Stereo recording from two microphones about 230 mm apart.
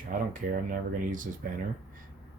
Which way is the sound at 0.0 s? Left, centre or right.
Right.